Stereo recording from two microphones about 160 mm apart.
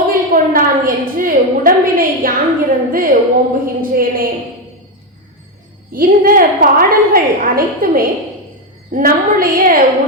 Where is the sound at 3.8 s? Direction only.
65° right (ahead or behind).